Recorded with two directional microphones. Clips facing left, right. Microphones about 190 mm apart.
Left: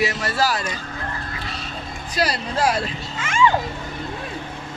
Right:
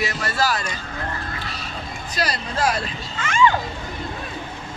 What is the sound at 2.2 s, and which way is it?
Speech, 10° left (ahead or behind).